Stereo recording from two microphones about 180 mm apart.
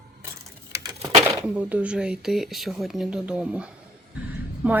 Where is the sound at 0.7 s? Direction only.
20° right (ahead or behind).